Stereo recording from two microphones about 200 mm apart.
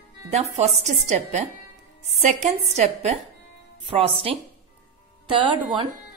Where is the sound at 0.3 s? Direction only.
30° right (ahead or behind).